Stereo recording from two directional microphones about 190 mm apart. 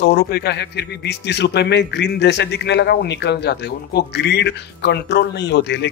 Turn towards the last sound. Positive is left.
turn(degrees=65)  # may be behind; listen again after turning